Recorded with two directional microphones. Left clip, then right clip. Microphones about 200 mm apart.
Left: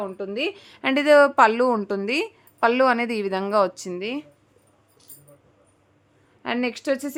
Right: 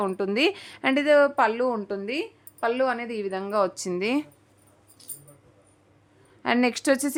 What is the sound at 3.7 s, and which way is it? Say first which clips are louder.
Speech: right 2 dB; 5° right (ahead or behind).